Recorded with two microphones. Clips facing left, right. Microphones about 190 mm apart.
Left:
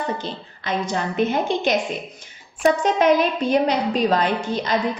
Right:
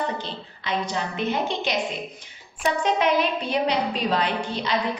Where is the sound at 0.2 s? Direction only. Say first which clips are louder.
Left 3 dB; 45° left (ahead or behind).